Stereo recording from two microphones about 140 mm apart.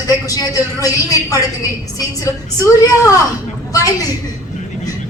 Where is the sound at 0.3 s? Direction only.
25° left (ahead or behind).